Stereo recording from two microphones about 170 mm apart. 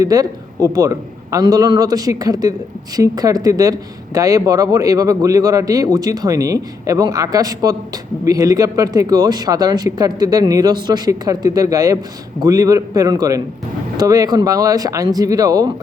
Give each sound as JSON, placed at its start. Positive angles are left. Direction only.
{"t": 0.0, "sound": "speech", "side_deg": -20}